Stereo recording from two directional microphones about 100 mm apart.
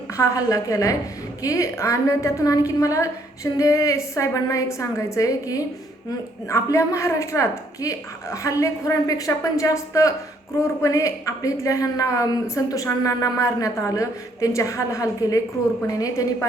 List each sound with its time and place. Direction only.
0.2 s speech: 30° left (ahead or behind)